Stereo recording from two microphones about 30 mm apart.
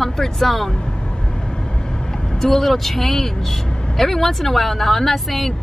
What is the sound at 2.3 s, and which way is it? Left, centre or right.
Speech, centre.